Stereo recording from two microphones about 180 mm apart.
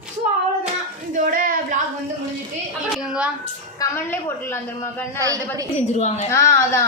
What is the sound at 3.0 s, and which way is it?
Speech, 5° right (ahead or behind).